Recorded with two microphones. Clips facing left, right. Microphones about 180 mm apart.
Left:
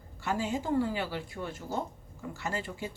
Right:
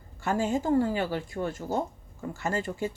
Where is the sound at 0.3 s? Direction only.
50° right (ahead or behind).